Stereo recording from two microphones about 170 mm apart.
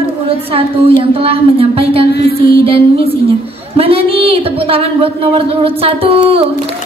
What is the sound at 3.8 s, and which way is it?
Speech, 35° right (ahead or behind).